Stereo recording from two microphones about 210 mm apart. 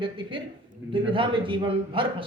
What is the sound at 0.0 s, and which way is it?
A woman's voice, 25° right (ahead or behind).